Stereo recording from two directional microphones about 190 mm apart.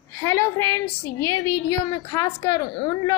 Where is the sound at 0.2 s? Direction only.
15° left (ahead or behind).